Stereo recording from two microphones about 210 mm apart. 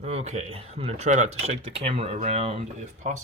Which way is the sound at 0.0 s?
30° right (ahead or behind).